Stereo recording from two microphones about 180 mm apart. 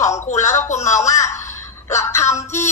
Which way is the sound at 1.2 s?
15° left (ahead or behind).